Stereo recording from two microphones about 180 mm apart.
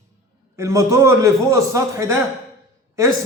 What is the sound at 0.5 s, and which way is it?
A man's voice, 15° right (ahead or behind).